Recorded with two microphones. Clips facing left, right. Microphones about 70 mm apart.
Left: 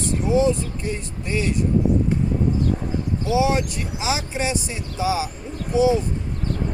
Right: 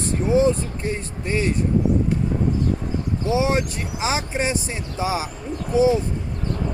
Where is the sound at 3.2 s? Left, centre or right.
Right.